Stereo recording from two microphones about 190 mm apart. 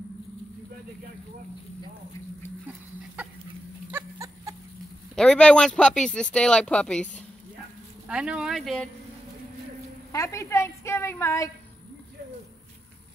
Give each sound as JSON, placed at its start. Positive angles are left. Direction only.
{"t": 3.9, "sound": "a sound", "side_deg": -15}
{"t": 5.1, "sound": "speech", "side_deg": 5}
{"t": 8.1, "sound": "speech", "side_deg": -5}
{"t": 10.1, "sound": "a woman's voice", "side_deg": 15}